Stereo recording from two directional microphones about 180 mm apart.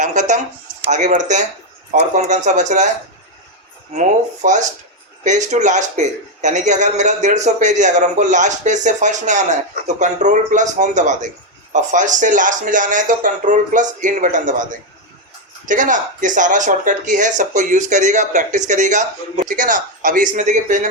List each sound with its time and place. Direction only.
0.0 s a sound: 45° right (ahead or behind)
0.9 s speech: 40° right (ahead or behind)
4.4 s a man's voice: 45° right (ahead or behind)